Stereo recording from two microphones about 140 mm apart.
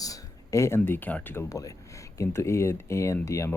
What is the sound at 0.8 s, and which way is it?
Speech, 10° left (ahead or behind).